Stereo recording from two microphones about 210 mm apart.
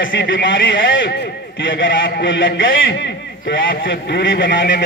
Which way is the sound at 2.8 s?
55° left (ahead or behind).